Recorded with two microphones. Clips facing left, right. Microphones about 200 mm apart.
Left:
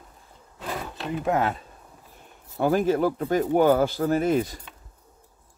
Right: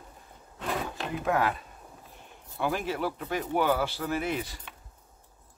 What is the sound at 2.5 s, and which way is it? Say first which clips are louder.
Speech: left 9 dB; 45° left (ahead or behind).